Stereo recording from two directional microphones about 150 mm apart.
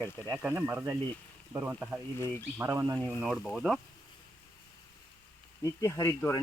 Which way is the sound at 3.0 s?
Centre (ahead or behind).